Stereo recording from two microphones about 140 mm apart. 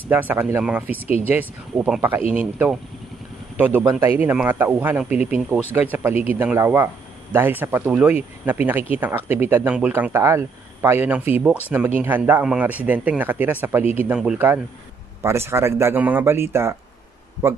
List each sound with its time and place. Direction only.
0.1 s speech: 15° right (ahead or behind)
15.2 s speech: 20° right (ahead or behind)